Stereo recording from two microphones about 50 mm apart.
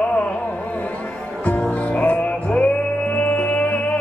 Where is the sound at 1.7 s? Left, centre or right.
Left.